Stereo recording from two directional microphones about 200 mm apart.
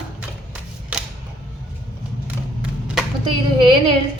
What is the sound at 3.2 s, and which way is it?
Speech, 25° right (ahead or behind).